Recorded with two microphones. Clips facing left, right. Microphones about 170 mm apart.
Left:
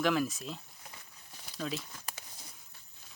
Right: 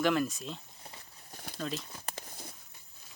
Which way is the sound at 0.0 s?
Centre (ahead or behind).